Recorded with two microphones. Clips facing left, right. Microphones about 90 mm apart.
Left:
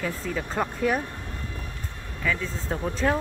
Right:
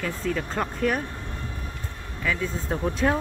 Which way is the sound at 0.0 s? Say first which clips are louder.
Right 2 dB; 5° left (ahead or behind).